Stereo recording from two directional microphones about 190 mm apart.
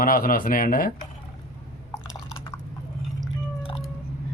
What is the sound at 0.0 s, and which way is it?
Speech, 50° left (ahead or behind).